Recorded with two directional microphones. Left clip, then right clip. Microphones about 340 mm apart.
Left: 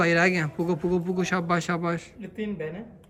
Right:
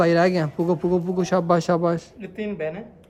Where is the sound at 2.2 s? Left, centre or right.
Right.